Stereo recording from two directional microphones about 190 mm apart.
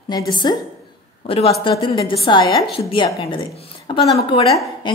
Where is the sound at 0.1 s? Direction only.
20° left (ahead or behind).